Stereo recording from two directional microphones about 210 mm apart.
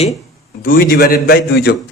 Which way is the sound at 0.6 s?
40° left (ahead or behind).